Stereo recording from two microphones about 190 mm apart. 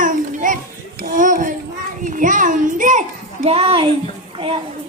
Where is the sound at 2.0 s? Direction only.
45° right (ahead or behind).